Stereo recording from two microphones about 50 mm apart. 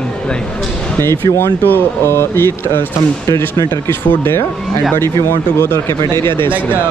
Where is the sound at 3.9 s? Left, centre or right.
Left.